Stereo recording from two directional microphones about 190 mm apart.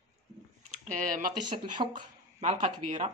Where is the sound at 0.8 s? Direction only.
45° right (ahead or behind).